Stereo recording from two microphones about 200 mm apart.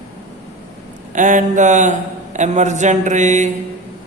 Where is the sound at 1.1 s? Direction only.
40° right (ahead or behind).